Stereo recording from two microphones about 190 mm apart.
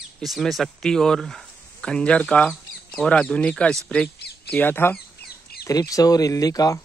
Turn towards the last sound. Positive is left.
turn(degrees=20)  # may be behind; listen again after turning